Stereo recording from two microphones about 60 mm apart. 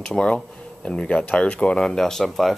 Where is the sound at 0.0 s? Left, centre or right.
Centre.